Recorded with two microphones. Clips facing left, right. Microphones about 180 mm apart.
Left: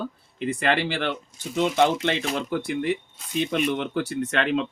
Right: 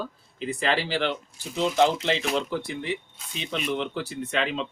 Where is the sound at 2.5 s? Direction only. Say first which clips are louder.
Left 5 dB; 65° left (ahead or behind).